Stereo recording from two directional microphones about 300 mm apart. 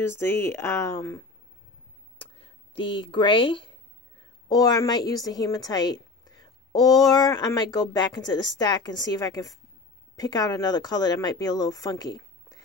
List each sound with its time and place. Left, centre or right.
0.0 s a woman's voice: centre
2.1 s a sound: centre
4.5 s a woman's voice: centre